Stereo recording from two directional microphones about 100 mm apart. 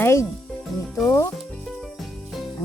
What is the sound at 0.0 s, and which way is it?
Speech, 25° left (ahead or behind).